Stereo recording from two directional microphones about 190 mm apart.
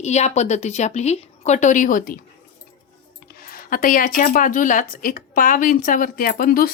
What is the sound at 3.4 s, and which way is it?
Speech, 50° left (ahead or behind).